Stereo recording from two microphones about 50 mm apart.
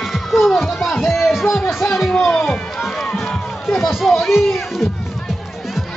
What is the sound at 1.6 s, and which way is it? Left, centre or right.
Speech, left.